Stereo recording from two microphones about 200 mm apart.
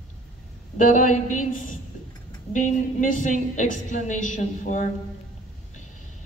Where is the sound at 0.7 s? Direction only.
40° left (ahead or behind).